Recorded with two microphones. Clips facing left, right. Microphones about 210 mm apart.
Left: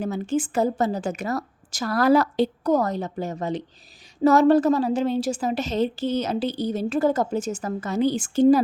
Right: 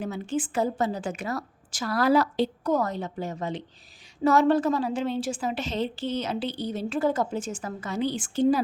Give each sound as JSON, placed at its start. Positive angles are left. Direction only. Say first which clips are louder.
{"t": 0.0, "sound": "a woman's voice", "louder": "left 5 dB", "side_deg": 40}